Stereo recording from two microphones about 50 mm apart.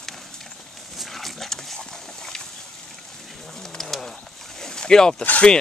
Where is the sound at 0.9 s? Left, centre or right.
Centre.